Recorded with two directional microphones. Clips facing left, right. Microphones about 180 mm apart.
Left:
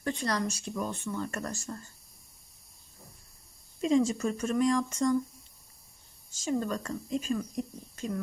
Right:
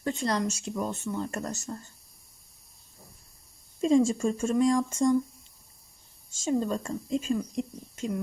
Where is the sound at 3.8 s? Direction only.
30° right (ahead or behind).